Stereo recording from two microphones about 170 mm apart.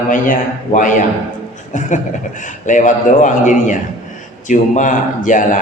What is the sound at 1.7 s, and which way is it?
A man's voice, 45° left (ahead or behind).